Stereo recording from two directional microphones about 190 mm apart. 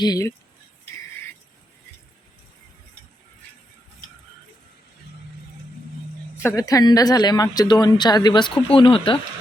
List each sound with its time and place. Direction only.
0.0 s a woman's voice: 20° left (ahead or behind)
6.4 s a woman's voice: 15° left (ahead or behind)